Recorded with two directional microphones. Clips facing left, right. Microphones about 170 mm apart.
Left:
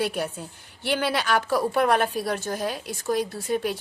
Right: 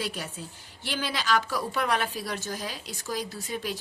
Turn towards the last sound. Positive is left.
turn(degrees=55)  # may be behind; listen again after turning